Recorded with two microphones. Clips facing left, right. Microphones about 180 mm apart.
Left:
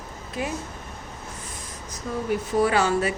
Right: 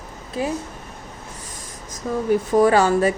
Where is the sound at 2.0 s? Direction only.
40° right (ahead or behind).